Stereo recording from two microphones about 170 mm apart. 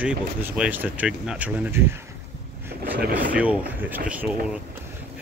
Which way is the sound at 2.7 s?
75° right (ahead or behind).